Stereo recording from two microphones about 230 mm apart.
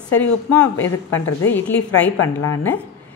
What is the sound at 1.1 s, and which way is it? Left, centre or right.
Speech, left.